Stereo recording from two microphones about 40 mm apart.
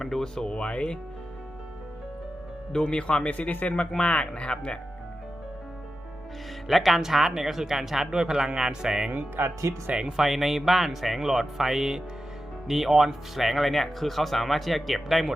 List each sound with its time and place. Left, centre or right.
0.0 s speech: centre
0.5 s speech: left
2.7 s speech: centre
3.2 s speech: left
6.7 s speech: centre
8.1 s speech: centre
9.1 s speech: right
9.9 s speech: right
10.2 s speech: centre